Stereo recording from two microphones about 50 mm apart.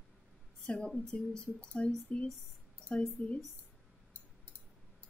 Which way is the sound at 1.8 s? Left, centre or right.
Left.